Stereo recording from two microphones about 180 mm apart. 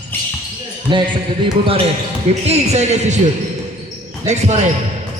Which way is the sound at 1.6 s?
30° right (ahead or behind).